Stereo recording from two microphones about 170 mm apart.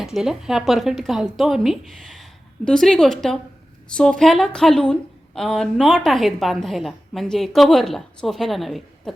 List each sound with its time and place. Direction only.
0.0 s a woman's voice: centre (ahead or behind)